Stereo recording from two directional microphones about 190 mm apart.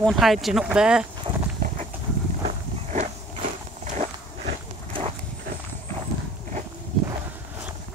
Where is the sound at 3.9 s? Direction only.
40° right (ahead or behind).